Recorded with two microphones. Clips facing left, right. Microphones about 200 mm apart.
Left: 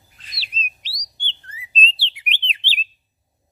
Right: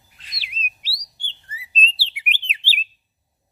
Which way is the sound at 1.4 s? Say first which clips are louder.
Left 1 dB; 5° right (ahead or behind).